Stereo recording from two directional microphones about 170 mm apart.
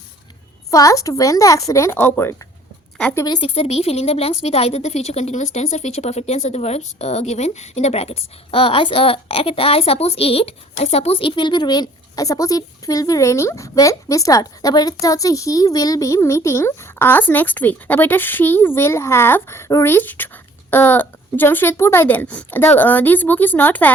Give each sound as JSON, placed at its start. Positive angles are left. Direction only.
{"t": 0.7, "sound": "a woman's voice", "side_deg": 20}
{"t": 3.2, "sound": "a woman's voice", "side_deg": 25}
{"t": 3.5, "sound": "a woman's voice", "side_deg": 35}